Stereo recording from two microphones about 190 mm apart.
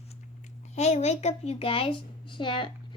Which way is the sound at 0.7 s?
35° left (ahead or behind).